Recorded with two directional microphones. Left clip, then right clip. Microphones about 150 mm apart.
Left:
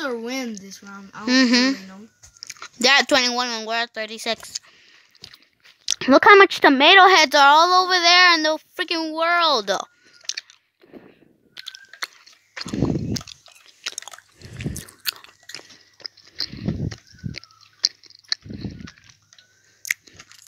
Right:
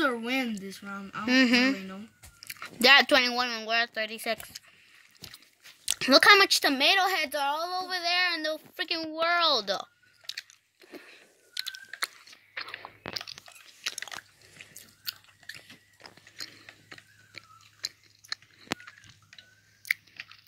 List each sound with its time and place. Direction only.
0.2 s speech: 75° left (ahead or behind)
1.2 s speech: 30° left (ahead or behind)
5.2 s crunch: 25° left (ahead or behind)
5.9 s speech: 30° left (ahead or behind)
10.9 s squish: 10° left (ahead or behind)
12.5 s biting: 25° left (ahead or behind)
14.7 s chewing: 50° left (ahead or behind)
16.0 s a sound: 35° left (ahead or behind)
16.3 s chewing: 15° left (ahead or behind)
19.8 s crunch: 30° left (ahead or behind)